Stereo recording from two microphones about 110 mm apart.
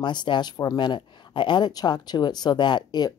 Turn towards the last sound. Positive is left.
turn(degrees=40)  # may be behind; listen again after turning